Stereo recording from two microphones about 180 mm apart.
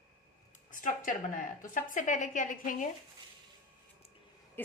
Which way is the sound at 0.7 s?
45° left (ahead or behind).